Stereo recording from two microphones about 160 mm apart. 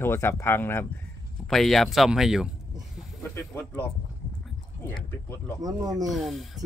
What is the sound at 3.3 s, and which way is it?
Speech, 10° left (ahead or behind).